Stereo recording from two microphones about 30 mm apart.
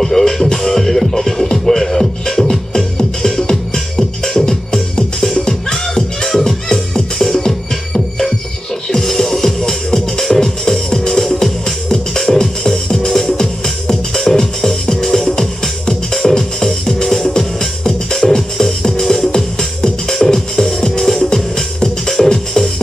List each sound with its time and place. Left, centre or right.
0.0 s music: centre
18.2 s music: left